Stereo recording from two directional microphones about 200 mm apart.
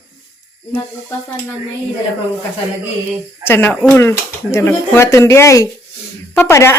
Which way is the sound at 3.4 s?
10° left (ahead or behind).